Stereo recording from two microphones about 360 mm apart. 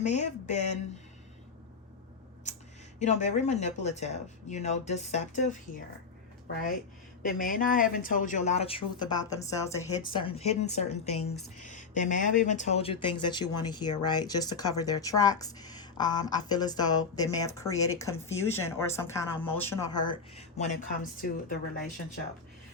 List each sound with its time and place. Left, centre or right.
0.0 s speech: centre
2.5 s a sound: centre
3.0 s speech: centre
7.2 s speech: left; by 20.0 s centre
20.0 s speech: centre